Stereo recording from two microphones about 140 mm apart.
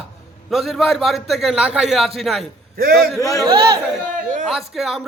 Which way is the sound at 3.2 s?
20° left (ahead or behind).